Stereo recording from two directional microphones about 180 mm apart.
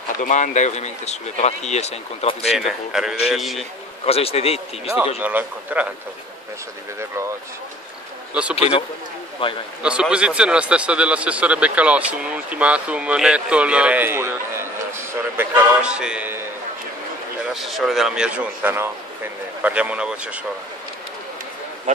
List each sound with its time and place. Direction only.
0.2 s speech: 40° left (ahead or behind)
2.5 s a man's voice: centre (ahead or behind)
4.0 s speech: 35° left (ahead or behind)
5.2 s speech: 10° right (ahead or behind)
8.5 s a man's voice: 35° left (ahead or behind)
9.8 s speech: 5° right (ahead or behind)
17.6 s a man's voice: centre (ahead or behind)